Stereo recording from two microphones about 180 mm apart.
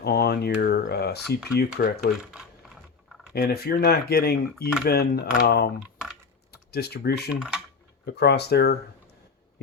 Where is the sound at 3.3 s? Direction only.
60° left (ahead or behind).